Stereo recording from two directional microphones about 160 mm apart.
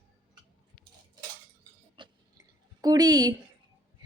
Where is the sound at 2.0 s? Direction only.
25° right (ahead or behind).